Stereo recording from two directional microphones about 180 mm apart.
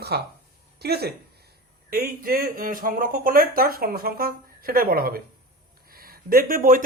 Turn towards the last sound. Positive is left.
turn(degrees=-50)  # may be behind; listen again after turning